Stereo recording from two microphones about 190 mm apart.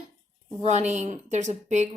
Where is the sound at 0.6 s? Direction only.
35° right (ahead or behind).